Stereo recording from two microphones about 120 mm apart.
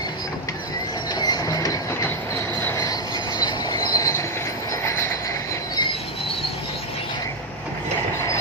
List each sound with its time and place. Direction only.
1.1 s train: 35° left (ahead or behind)